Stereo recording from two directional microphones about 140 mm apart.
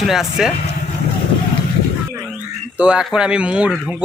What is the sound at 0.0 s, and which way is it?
Speech, centre (ahead or behind).